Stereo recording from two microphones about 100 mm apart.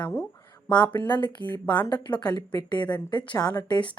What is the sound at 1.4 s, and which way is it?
Speech, 55° left (ahead or behind).